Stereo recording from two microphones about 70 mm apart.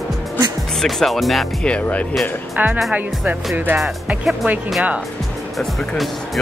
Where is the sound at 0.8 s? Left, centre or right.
Centre.